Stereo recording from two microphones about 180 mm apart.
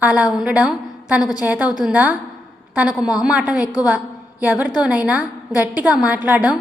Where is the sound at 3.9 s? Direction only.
5° right (ahead or behind).